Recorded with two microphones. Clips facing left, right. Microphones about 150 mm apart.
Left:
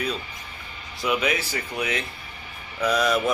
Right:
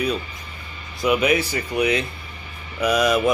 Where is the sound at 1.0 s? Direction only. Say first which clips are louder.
Right 6 dB; 15° right (ahead or behind).